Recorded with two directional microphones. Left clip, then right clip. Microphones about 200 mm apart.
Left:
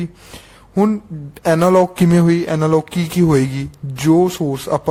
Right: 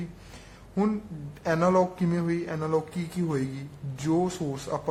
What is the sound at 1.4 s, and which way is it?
Speech, 50° left (ahead or behind).